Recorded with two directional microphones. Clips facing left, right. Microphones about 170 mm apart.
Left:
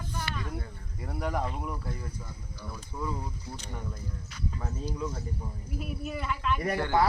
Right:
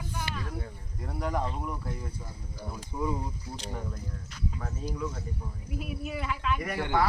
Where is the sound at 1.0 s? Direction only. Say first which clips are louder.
Even; 5° left (ahead or behind).